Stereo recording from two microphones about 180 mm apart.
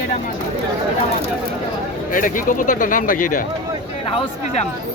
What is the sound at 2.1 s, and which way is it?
Speech, 50° left (ahead or behind).